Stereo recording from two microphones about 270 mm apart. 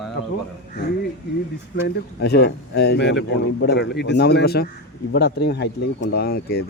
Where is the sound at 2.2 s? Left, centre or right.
Left.